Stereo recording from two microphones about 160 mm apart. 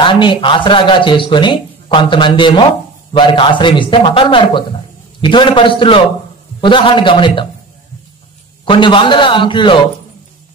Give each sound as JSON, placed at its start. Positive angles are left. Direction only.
{"t": 0.0, "sound": "speech", "side_deg": 30}
{"t": 8.6, "sound": "speech", "side_deg": 30}